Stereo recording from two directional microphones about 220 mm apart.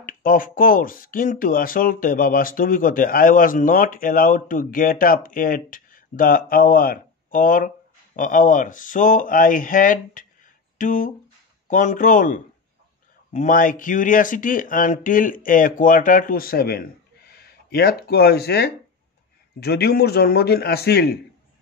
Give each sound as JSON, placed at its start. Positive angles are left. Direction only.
{"t": 0.0, "sound": "a man's voice", "side_deg": 40}